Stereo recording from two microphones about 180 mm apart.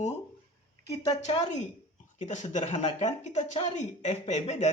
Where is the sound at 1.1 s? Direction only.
40° left (ahead or behind).